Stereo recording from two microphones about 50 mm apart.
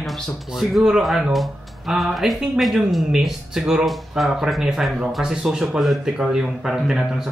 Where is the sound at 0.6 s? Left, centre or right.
Centre.